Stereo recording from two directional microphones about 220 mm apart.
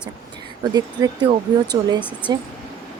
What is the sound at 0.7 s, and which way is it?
Speech, 20° right (ahead or behind).